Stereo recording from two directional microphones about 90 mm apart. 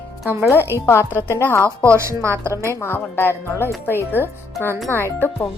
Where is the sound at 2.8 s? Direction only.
25° left (ahead or behind).